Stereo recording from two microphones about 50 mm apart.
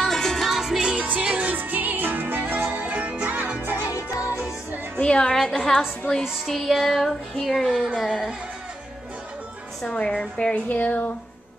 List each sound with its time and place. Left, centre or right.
0.0 s music: centre
0.6 s music: centre
1.6 s music: right
2.6 s music: right
3.7 s music: left
4.9 s a woman's voice: centre
6.4 s music: centre
9.9 s a woman's voice: centre
10.7 s speech: left